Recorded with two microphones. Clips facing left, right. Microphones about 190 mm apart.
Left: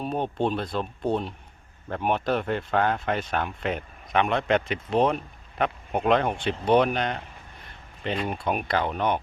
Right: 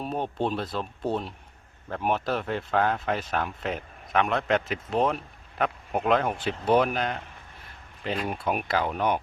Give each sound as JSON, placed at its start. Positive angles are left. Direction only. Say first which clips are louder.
{"t": 0.0, "sound": "speech", "louder": "left 2 dB", "side_deg": -5}